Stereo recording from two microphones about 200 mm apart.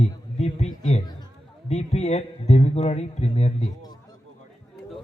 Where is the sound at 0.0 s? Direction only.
35° left (ahead or behind).